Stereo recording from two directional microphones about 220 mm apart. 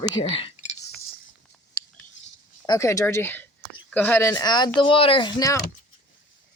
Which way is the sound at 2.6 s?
15° left (ahead or behind).